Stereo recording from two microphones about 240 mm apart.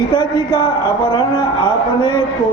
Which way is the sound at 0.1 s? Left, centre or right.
Centre.